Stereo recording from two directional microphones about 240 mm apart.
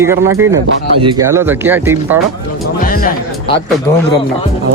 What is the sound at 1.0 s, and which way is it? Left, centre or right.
Speech, centre.